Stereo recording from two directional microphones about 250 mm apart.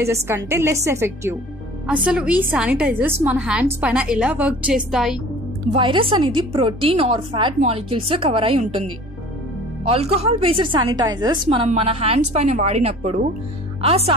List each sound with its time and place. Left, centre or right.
0.0 s a woman's voice: centre
5.7 s a woman's voice: right
9.8 s a woman's voice: right